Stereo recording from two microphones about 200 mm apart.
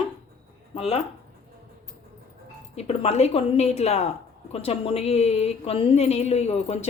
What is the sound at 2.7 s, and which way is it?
Speech, 30° left (ahead or behind).